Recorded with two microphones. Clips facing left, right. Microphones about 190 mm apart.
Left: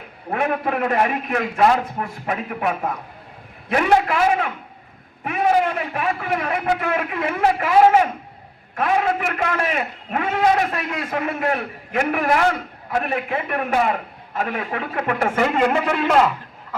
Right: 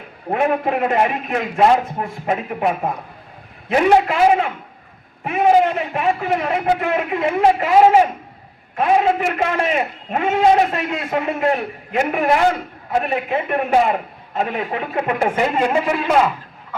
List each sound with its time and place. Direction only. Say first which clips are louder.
0.3 s a man's voice: right 4 dB; 25° right (ahead or behind)
5.2 s a man's voice: right 4 dB; 20° right (ahead or behind)